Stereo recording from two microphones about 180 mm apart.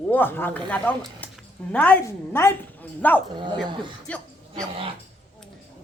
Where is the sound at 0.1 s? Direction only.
10° left (ahead or behind).